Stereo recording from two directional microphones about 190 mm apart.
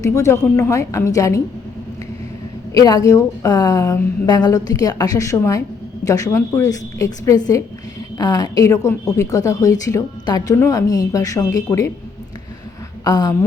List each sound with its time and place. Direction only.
0.0 s speech: 15° left (ahead or behind)
2.7 s a woman's voice: 20° left (ahead or behind)
13.1 s a woman's voice: 20° left (ahead or behind)